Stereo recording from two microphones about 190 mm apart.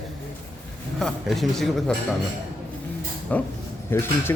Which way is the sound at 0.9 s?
Centre (ahead or behind).